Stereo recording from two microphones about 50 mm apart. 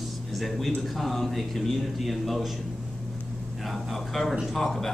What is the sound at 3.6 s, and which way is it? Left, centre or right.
A man's voice, centre.